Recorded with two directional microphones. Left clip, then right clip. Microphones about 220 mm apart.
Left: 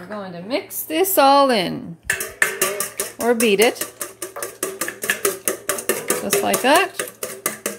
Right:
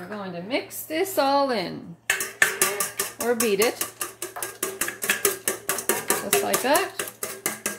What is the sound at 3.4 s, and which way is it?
Speech, 35° left (ahead or behind).